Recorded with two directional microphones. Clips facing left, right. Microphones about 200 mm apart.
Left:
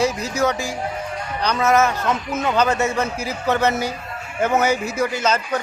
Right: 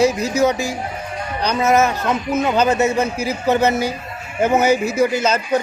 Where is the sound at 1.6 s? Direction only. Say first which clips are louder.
Right 1 dB; 25° right (ahead or behind).